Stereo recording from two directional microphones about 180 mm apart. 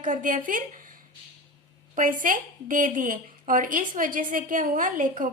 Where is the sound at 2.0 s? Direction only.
50° right (ahead or behind).